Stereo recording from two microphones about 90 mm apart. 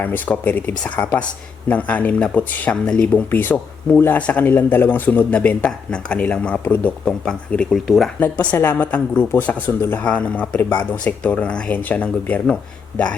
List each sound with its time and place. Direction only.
0.0 s speech: 20° left (ahead or behind); by 8.1 s centre (ahead or behind)
8.2 s speech: 15° left (ahead or behind)